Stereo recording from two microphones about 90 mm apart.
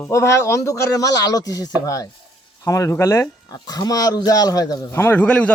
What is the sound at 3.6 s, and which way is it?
Speech, 50° left (ahead or behind).